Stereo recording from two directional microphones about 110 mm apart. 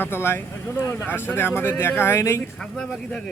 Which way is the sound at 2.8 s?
5° left (ahead or behind).